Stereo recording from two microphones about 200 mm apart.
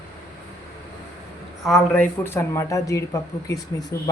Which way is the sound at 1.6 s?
5° left (ahead or behind).